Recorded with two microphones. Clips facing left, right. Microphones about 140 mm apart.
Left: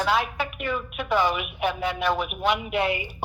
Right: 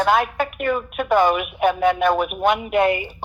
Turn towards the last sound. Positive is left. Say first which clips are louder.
# right 7 dB
turn(degrees=-50)  # may be behind; listen again after turning